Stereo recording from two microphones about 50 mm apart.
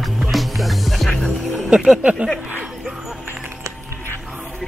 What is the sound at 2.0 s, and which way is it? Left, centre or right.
Speech, right.